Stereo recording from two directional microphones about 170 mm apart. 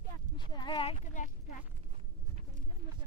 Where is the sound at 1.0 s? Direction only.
50° left (ahead or behind).